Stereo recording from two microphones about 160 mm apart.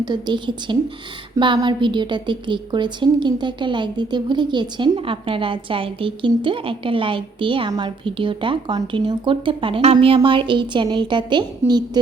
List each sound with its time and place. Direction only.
0.0 s a woman's voice: 25° right (ahead or behind)